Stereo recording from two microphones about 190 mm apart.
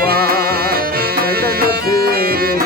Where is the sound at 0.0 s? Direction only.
55° right (ahead or behind).